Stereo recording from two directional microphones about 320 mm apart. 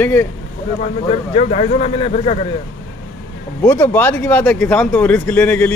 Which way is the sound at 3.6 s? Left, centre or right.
Centre.